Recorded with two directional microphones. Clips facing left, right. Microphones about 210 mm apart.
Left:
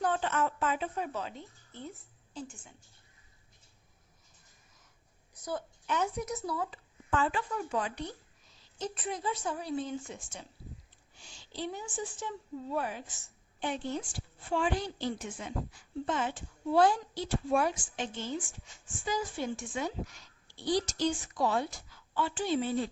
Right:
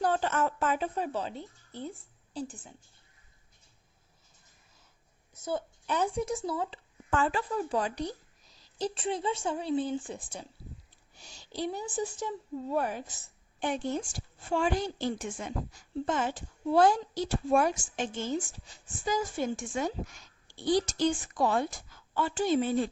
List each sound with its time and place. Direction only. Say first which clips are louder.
0.0 s a woman's voice: right 2 dB; 35° right (ahead or behind)
5.3 s a woman's voice: right 4 dB; 25° right (ahead or behind)
7.1 s a woman's voice: right 2 dB; 40° right (ahead or behind)